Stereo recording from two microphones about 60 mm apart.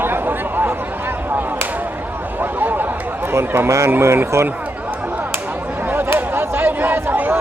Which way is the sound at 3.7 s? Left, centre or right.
Right.